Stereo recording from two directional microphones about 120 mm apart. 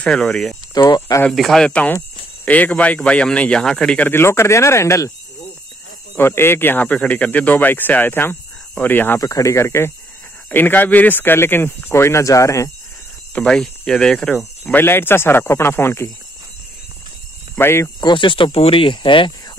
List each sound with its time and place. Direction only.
0.0 s speech: 5° left (ahead or behind)
0.7 s speech: 35° left (ahead or behind)
1.3 s speech: centre (ahead or behind); by 5.1 s 25° left (ahead or behind)
6.1 s speech: 20° left (ahead or behind)
9.2 s speech: 25° left (ahead or behind)
13.3 s cricket: 5° left (ahead or behind)
14.7 s speech: 20° left (ahead or behind)
17.6 s speech: 20° left (ahead or behind)
18.0 s speech: 45° left (ahead or behind)